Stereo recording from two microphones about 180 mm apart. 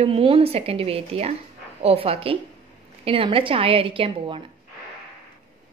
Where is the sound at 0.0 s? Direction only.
30° right (ahead or behind).